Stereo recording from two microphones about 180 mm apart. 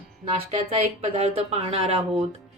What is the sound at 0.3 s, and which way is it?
A woman's voice, 35° right (ahead or behind).